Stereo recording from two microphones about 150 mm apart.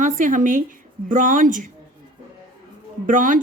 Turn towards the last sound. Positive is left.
turn(degrees=-60)  # may be behind; listen again after turning